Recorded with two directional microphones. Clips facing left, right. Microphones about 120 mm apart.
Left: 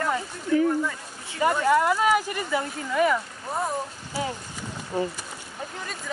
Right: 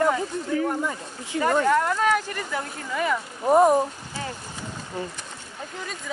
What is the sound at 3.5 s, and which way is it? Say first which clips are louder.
Speech: right 12 dB; 75° right (ahead or behind).